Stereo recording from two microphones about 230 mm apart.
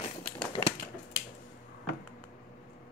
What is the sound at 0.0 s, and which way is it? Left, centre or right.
Typewriter, left.